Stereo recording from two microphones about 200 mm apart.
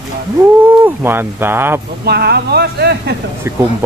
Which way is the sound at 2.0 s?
55° right (ahead or behind).